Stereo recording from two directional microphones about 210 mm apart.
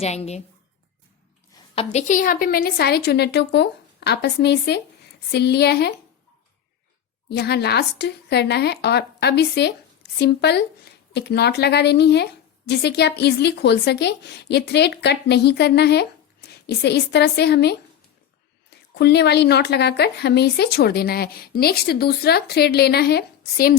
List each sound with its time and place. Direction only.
0.0 s a woman's voice: 30° left (ahead or behind)
1.7 s speech: 30° left (ahead or behind); by 5.9 s 50° left (ahead or behind)
7.3 s speech: 50° left (ahead or behind)